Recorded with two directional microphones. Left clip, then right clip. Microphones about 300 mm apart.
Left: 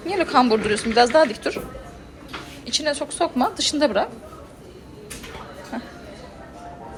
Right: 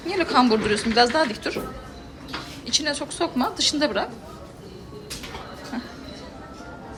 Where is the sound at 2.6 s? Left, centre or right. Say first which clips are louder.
Left 1 dB; centre.